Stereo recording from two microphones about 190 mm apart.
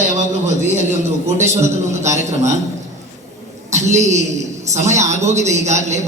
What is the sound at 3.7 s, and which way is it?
A man's voice, 35° right (ahead or behind).